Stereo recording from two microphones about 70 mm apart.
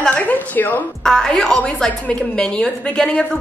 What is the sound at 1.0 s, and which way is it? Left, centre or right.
A woman's voice, centre.